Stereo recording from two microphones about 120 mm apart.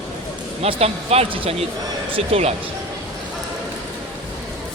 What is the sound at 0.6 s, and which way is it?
Speech, 60° right (ahead or behind).